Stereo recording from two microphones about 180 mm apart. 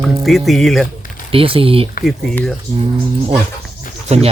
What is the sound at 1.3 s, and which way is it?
Speech, 30° right (ahead or behind).